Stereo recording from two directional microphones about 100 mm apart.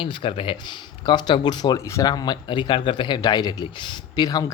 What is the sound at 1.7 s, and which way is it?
Speech, 35° left (ahead or behind).